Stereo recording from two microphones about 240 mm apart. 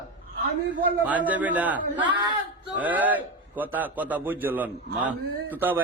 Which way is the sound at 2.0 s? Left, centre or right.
Centre.